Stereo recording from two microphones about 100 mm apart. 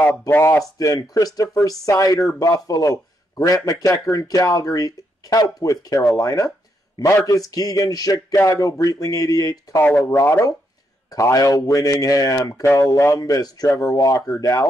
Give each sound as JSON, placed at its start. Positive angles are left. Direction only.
{"t": 0.3, "sound": "a man's voice", "side_deg": 25}
{"t": 10.0, "sound": "a man's voice", "side_deg": 25}